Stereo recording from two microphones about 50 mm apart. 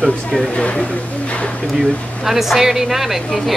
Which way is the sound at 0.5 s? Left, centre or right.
Left.